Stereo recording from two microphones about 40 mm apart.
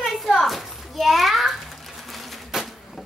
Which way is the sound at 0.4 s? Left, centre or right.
Centre.